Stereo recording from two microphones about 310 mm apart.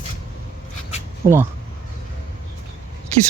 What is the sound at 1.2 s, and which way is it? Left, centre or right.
Speech, right.